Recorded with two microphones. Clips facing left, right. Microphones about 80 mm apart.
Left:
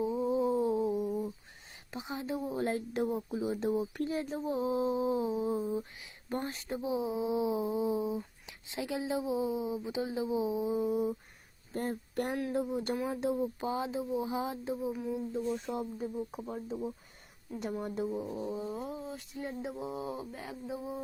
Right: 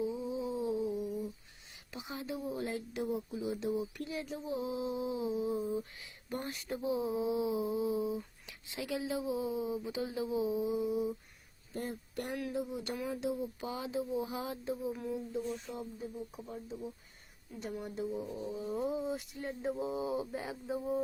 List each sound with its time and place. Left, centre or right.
0.0 s a sound: left
1.9 s speech: left
2.6 s speech: left
10.8 s speech: left
14.9 s mantra: centre
15.8 s speech: left
18.3 s speech: left
18.7 s mantra: centre